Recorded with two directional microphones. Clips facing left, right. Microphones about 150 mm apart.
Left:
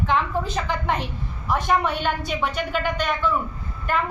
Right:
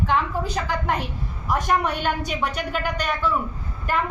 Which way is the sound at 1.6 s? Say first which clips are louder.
Left 1 dB; 45° right (ahead or behind).